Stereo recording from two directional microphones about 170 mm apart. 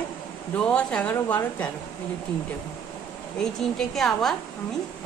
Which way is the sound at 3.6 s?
Centre (ahead or behind).